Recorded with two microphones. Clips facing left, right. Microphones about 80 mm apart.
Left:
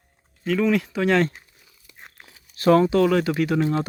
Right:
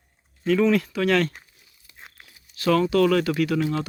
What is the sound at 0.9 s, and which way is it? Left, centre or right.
Speech, left.